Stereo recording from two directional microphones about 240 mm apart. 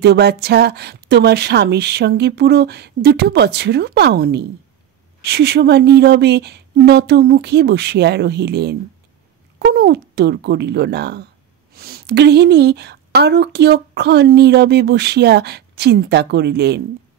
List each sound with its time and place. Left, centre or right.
0.0 s a woman's voice: right